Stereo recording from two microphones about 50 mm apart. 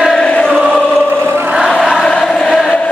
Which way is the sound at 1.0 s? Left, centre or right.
Right.